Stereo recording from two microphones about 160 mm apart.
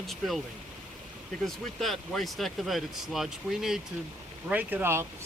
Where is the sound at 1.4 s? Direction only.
Centre (ahead or behind).